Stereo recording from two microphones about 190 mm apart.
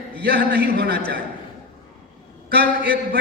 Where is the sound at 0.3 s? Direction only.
55° right (ahead or behind).